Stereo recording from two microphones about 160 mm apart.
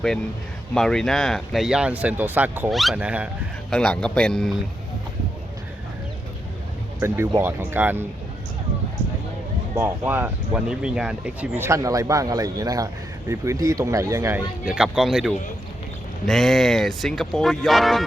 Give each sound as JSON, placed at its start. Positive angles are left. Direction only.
{"t": 0.7, "sound": "speech", "side_deg": 5}
{"t": 3.7, "sound": "speech", "side_deg": 5}
{"t": 7.0, "sound": "speech", "side_deg": -15}
{"t": 9.7, "sound": "speech", "side_deg": -15}